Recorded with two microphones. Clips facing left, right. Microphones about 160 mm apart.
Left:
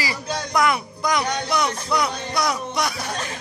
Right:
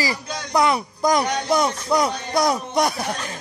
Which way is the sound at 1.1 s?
45° right (ahead or behind).